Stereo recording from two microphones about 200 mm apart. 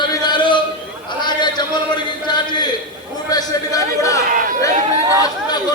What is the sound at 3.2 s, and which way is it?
Speech, 20° left (ahead or behind).